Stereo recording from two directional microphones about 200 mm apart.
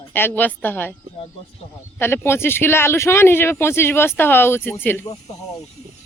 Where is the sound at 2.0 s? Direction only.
10° left (ahead or behind).